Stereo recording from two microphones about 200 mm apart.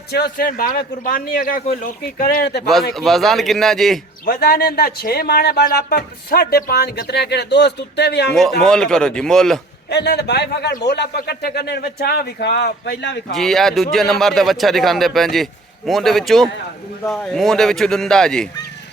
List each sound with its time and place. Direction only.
0.1 s speech: 50° left (ahead or behind)
2.9 s a man's voice: centre (ahead or behind)
4.3 s speech: 50° left (ahead or behind)
8.3 s a man's voice: centre (ahead or behind)
9.9 s a man's voice: 55° left (ahead or behind)
13.3 s a man's voice: centre (ahead or behind)